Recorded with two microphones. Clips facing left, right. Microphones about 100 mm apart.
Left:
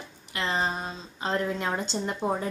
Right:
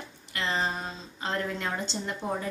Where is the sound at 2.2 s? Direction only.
20° left (ahead or behind).